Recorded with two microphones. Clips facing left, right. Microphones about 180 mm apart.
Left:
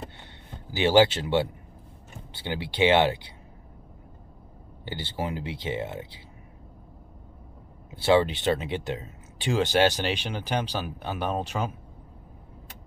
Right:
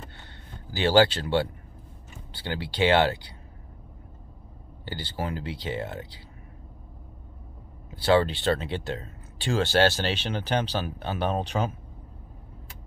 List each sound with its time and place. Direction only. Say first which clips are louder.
0.7 s speech: left 1 dB; 20° left (ahead or behind)
4.8 s speech: left 1 dB; 20° left (ahead or behind)
7.9 s speech: left 1 dB; 20° left (ahead or behind); by 11.7 s 5° left (ahead or behind)